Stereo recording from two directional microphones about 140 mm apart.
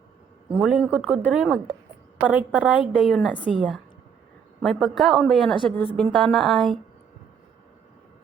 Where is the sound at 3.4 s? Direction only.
10° right (ahead or behind).